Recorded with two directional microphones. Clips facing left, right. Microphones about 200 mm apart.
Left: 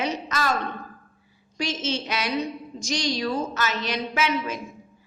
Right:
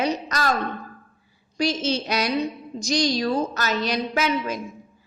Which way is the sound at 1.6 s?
35° right (ahead or behind).